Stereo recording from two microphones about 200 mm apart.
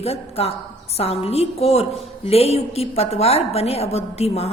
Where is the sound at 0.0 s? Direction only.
30° left (ahead or behind).